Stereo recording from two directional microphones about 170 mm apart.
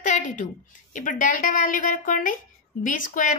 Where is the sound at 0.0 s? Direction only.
50° left (ahead or behind).